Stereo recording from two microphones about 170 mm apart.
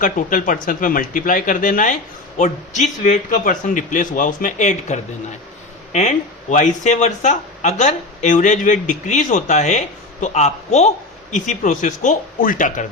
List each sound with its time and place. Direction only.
0.0 s speech: 50° left (ahead or behind)